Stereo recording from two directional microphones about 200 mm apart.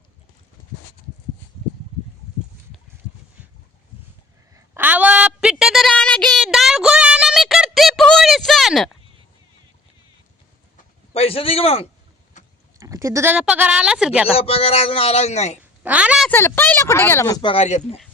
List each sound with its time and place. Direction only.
4.5 s a sound: 10° right (ahead or behind)
11.1 s a sound: 30° left (ahead or behind)
12.8 s speech: 15° right (ahead or behind)
14.3 s a man's voice: 30° left (ahead or behind)
15.8 s speech: 5° right (ahead or behind)
16.3 s speech: 10° left (ahead or behind); by 17.8 s 35° left (ahead or behind)